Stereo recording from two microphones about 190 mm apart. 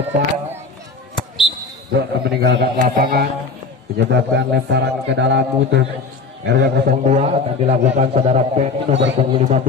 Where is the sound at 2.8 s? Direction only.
50° right (ahead or behind).